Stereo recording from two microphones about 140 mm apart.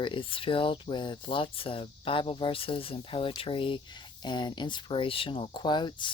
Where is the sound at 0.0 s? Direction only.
35° left (ahead or behind).